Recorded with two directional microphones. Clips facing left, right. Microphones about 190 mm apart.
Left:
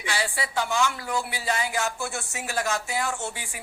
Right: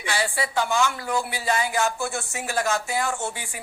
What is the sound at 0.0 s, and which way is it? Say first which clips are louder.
Speech: right 3 dB; 50° right (ahead or behind).